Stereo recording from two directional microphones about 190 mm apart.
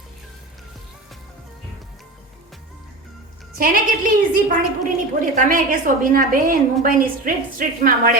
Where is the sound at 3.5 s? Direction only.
50° right (ahead or behind).